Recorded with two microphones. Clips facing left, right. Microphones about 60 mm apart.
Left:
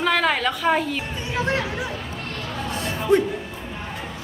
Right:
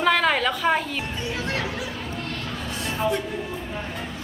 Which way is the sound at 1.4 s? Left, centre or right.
Left.